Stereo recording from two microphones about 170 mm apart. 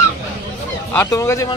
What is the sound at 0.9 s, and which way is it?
Speech, 15° left (ahead or behind).